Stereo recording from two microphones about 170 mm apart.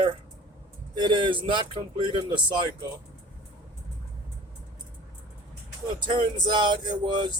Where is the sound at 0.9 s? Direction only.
25° right (ahead or behind).